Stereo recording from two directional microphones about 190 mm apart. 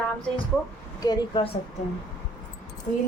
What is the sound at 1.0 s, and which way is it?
Speech, 25° left (ahead or behind).